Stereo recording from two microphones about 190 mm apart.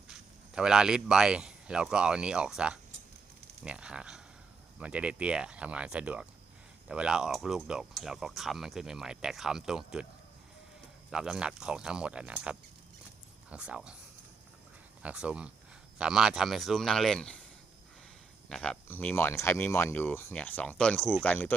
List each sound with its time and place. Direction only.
0.1 s speech: 5° right (ahead or behind)
11.1 s speech: 5° right (ahead or behind)
15.0 s speech: 5° right (ahead or behind)
18.4 s speech: 5° left (ahead or behind)